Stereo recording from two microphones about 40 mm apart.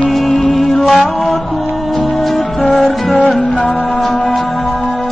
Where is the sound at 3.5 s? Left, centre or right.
Left.